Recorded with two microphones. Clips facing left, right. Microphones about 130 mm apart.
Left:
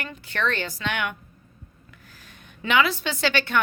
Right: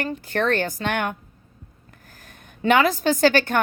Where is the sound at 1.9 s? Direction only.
45° right (ahead or behind).